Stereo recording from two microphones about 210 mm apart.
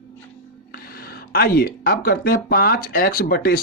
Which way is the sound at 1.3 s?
45° left (ahead or behind).